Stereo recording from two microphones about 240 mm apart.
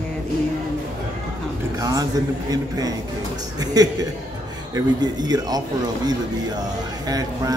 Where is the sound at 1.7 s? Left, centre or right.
Centre.